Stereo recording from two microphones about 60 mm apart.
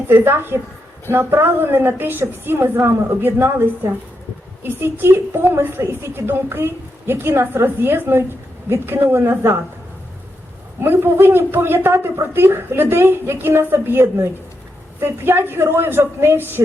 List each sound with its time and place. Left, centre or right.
0.1 s a woman's voice: right
10.8 s a woman's voice: right